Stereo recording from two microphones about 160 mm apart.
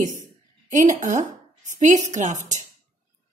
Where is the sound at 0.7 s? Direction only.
50° right (ahead or behind).